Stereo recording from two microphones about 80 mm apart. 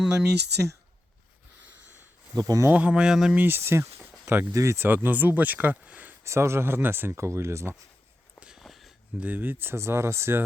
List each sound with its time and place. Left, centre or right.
0.0 s speech: centre
2.3 s speech: right
2.7 s speech: centre
3.3 s speech: right
6.2 s speech: right
8.4 s a sound: centre
8.6 s a sound: centre
9.2 s speech: right